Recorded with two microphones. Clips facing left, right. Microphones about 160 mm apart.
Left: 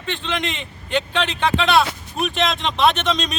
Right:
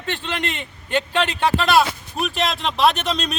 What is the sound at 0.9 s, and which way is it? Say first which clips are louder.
Speech: right 1 dB; 5° right (ahead or behind).